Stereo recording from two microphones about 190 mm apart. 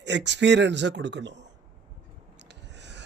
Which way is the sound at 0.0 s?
65° right (ahead or behind).